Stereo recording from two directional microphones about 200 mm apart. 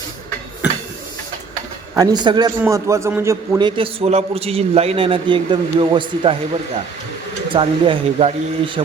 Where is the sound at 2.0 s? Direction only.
20° right (ahead or behind).